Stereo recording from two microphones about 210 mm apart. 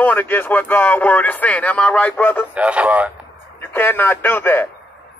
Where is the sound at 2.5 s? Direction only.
5° right (ahead or behind).